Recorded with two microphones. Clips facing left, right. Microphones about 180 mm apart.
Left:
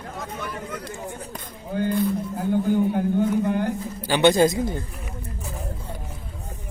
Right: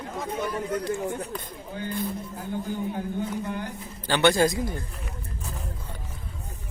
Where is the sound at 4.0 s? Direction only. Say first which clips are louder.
Left 4 dB; 15° left (ahead or behind).